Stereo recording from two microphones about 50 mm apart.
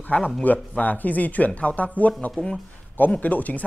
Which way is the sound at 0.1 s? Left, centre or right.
Left.